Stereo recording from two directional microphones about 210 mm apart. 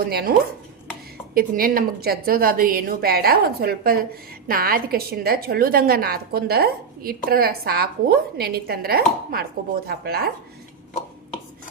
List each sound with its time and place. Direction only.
0.0 s a woman's voice: 45° right (ahead or behind)